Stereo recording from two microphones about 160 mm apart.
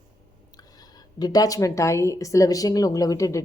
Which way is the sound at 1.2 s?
25° left (ahead or behind).